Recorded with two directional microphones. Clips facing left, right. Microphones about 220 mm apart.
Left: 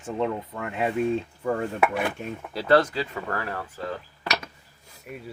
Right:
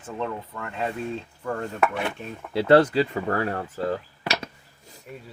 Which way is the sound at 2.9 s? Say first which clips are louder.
Right 6 dB; 30° right (ahead or behind).